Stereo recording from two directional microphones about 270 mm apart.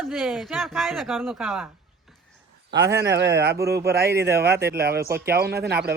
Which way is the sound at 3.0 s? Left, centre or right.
Right.